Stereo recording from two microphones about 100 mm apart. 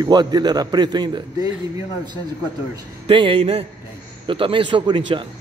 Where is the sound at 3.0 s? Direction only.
60° right (ahead or behind); by 3.7 s 80° right.